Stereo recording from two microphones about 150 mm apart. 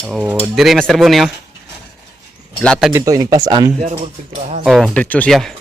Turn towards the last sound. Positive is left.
turn(degrees=5)  # may be behind; listen again after turning